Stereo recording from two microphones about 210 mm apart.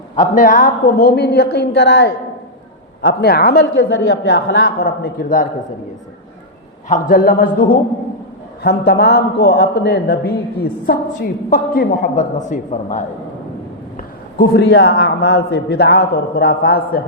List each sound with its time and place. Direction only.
0.2 s a man's voice: 40° left (ahead or behind)
6.8 s a man's voice: 35° left (ahead or behind)
13.9 s a man's voice: 45° left (ahead or behind)